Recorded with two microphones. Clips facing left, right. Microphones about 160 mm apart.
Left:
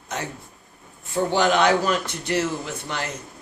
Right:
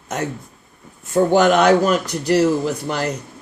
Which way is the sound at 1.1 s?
45° right (ahead or behind).